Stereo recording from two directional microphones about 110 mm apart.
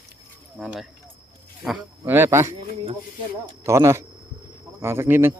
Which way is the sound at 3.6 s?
25° right (ahead or behind).